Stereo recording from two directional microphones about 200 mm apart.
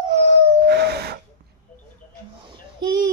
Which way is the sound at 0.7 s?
55° right (ahead or behind).